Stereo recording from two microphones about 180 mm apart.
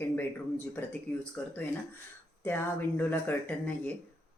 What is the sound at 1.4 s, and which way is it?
Speech, 5° left (ahead or behind).